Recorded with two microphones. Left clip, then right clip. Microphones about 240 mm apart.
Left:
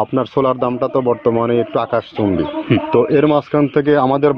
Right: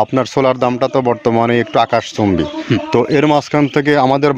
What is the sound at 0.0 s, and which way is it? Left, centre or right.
A man's voice, right.